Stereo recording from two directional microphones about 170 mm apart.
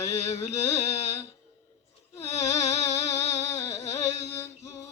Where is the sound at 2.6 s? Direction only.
40° left (ahead or behind).